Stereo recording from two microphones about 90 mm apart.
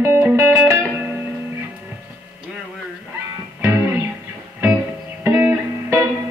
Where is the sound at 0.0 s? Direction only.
25° right (ahead or behind).